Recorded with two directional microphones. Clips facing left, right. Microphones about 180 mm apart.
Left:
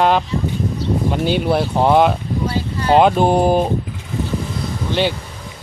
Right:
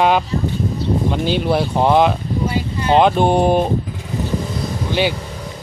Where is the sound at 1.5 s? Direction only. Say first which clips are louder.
Even; centre (ahead or behind).